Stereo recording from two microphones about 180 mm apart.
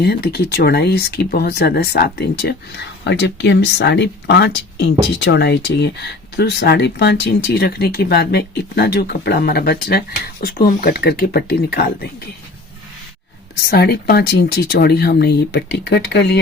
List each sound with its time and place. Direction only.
0.0 s speech: 60° left (ahead or behind)
13.7 s speech: 60° left (ahead or behind)